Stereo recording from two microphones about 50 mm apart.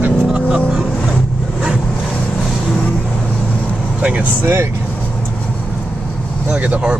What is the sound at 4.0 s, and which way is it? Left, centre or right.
Vehicle, right.